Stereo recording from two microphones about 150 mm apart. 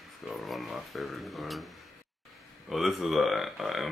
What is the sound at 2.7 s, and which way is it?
Speech, centre (ahead or behind).